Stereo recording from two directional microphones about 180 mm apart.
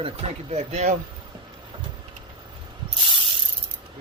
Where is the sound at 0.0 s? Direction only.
35° right (ahead or behind).